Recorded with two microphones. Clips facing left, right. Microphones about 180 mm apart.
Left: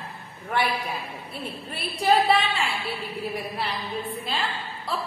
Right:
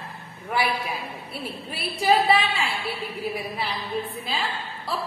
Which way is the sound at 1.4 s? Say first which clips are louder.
Right 1 dB; centre (ahead or behind).